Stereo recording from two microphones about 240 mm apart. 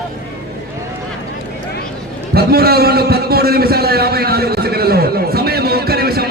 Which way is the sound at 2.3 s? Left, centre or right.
Right.